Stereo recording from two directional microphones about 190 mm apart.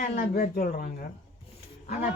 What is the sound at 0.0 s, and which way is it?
Speech, 45° left (ahead or behind).